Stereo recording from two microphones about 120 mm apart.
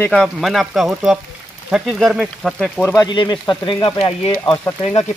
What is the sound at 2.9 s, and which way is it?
Speech, 40° left (ahead or behind).